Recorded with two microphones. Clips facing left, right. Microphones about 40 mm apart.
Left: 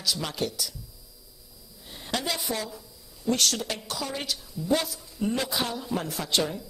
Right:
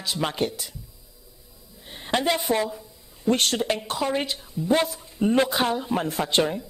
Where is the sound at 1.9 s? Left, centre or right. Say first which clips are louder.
Right 7 dB; right.